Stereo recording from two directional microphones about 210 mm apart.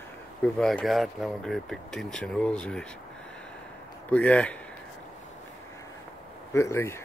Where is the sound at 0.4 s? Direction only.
5° left (ahead or behind).